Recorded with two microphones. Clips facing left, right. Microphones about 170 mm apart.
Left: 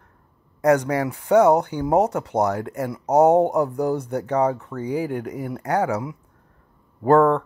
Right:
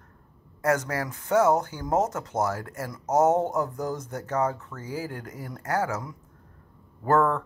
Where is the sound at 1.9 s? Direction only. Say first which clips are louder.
Left 6 dB; 65° left (ahead or behind).